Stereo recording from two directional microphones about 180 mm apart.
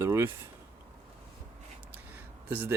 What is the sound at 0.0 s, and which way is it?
Speech, 15° right (ahead or behind).